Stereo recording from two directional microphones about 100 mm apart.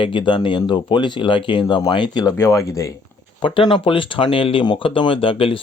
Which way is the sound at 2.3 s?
30° left (ahead or behind).